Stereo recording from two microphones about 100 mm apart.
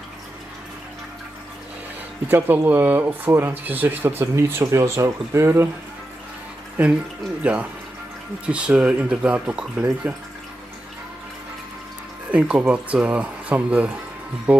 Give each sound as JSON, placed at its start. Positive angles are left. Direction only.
{"t": 2.2, "sound": "speech", "side_deg": -20}
{"t": 6.8, "sound": "speech", "side_deg": -15}
{"t": 12.3, "sound": "speech", "side_deg": -15}